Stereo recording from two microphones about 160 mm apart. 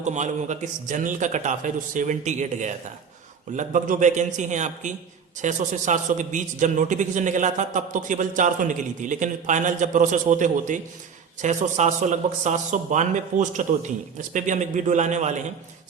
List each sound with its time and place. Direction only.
0.0 s a man's voice: 50° right (ahead or behind)